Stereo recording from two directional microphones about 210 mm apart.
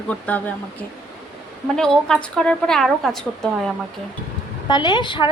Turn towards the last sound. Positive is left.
turn(degrees=20)  # may be behind; listen again after turning